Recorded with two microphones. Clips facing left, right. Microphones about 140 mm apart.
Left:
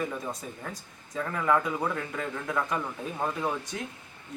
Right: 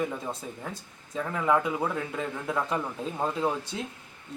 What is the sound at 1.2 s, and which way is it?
Speech, 15° right (ahead or behind).